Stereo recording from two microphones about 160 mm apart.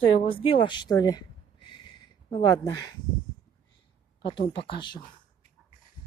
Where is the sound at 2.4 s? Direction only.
25° left (ahead or behind).